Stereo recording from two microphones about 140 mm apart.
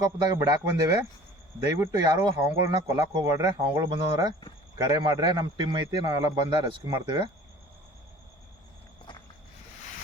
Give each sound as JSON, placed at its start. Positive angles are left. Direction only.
{"t": 0.2, "sound": "a man's voice", "side_deg": -25}